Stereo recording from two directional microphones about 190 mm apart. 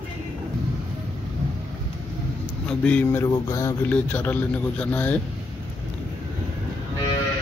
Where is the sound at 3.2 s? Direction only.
15° left (ahead or behind).